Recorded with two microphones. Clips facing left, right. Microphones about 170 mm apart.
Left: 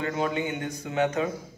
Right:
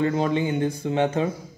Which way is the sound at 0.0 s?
30° right (ahead or behind).